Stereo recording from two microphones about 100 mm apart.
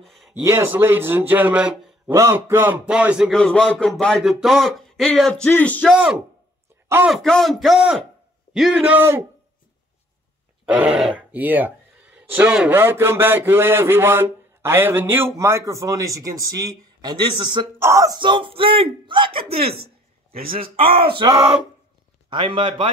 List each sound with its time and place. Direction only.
0.3 s a man's voice: 25° right (ahead or behind)
3.3 s speech: 10° left (ahead or behind)
5.9 s speech: 10° right (ahead or behind)
7.1 s speech: 5° left (ahead or behind); by 9.2 s 20° right (ahead or behind)
10.6 s grunt: 15° right (ahead or behind)
11.0 s a man's voice: 10° right (ahead or behind)
12.7 s a man's voice: 25° right (ahead or behind); by 17.6 s 45° right (ahead or behind)
17.7 s a man's voice: 30° right (ahead or behind)
18.1 s speech: 50° right (ahead or behind)
22.3 s speech: 55° right (ahead or behind)